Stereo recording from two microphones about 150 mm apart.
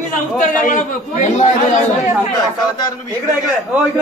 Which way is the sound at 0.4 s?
55° left (ahead or behind).